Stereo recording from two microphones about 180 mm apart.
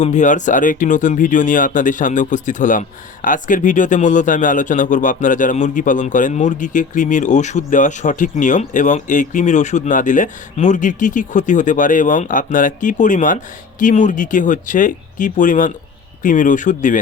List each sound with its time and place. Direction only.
0.0 s speech: 40° left (ahead or behind)